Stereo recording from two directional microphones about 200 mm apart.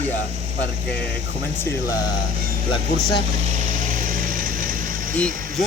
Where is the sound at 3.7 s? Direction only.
40° right (ahead or behind).